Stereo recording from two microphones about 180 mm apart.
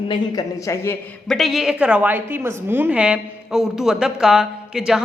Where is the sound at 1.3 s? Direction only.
Centre (ahead or behind).